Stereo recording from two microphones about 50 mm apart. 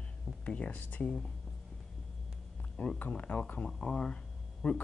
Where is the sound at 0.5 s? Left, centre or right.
Left.